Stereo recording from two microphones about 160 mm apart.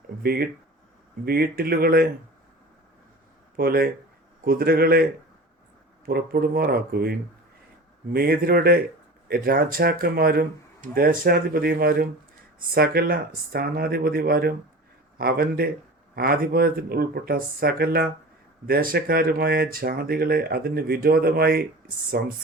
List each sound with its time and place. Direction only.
0.2 s speech: 70° right (ahead or behind)
3.6 s speech: 70° right (ahead or behind)
6.1 s speech: 70° right (ahead or behind)